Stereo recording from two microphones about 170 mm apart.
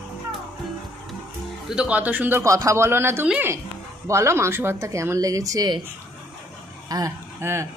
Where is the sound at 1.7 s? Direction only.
5° right (ahead or behind); by 5.8 s 25° right (ahead or behind).